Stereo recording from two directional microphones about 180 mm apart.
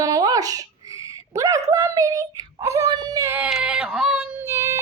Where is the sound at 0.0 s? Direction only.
20° right (ahead or behind).